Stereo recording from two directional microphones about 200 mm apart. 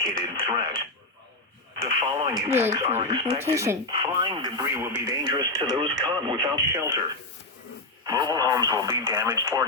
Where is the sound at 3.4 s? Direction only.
15° right (ahead or behind).